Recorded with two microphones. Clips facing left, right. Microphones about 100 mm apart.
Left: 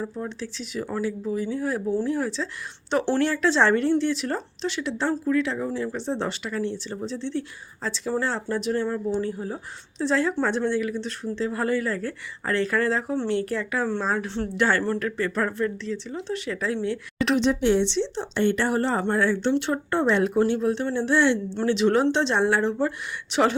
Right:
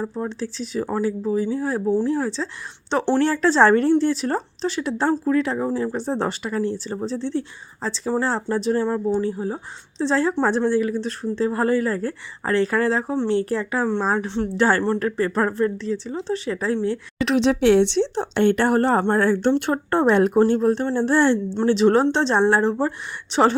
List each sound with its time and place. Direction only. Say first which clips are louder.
0.0 s speech: right 4 dB; 35° right (ahead or behind)
14.3 s speech: right 4 dB; 20° right (ahead or behind)
14.5 s speech: right 4 dB; 35° right (ahead or behind)
17.3 s speech: right 5 dB; 70° right (ahead or behind); by 23.6 s 35° right (ahead or behind)